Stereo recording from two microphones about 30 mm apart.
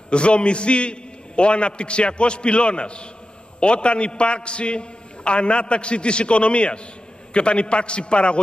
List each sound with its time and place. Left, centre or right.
0.1 s a man's voice: left